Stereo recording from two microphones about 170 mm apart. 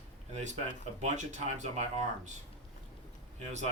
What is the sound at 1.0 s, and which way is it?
Speech, 45° right (ahead or behind).